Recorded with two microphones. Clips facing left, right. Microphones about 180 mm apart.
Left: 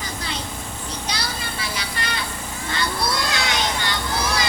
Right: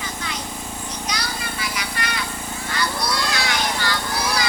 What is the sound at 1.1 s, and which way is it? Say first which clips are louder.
Music: right 1 dB; 30° left (ahead or behind).